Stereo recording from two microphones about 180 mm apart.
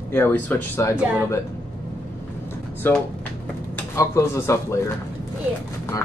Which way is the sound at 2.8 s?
10° left (ahead or behind).